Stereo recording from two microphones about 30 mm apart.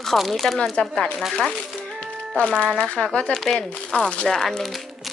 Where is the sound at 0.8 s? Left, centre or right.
Left.